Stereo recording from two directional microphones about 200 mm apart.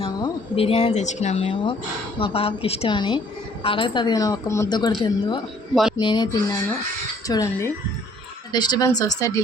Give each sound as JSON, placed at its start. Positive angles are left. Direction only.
{"t": 0.0, "sound": "a woman's voice", "side_deg": 30}